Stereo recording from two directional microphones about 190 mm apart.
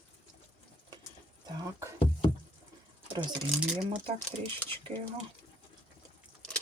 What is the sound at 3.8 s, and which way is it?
Speech, 30° right (ahead or behind).